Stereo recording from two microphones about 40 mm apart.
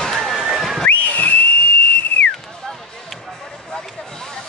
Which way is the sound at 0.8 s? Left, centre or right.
Left.